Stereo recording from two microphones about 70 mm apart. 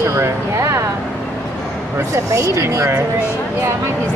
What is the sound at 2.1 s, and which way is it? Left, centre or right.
Speech, right.